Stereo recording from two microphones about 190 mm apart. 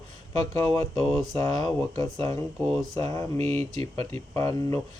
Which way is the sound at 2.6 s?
Centre (ahead or behind).